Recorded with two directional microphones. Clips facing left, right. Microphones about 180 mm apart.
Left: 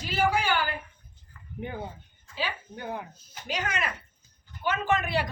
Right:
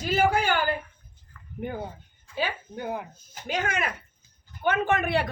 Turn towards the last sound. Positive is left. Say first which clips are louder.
# right 2 dB
turn(degrees=-60)  # may be behind; listen again after turning